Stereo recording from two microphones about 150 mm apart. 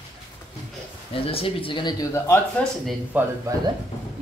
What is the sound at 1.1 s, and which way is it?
Speech, 40° left (ahead or behind).